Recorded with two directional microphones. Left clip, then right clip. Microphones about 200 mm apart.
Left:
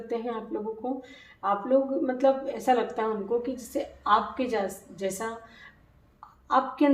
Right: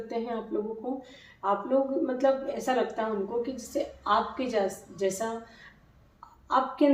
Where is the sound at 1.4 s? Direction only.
30° left (ahead or behind).